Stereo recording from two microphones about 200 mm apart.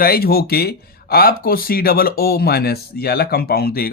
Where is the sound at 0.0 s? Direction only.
50° left (ahead or behind).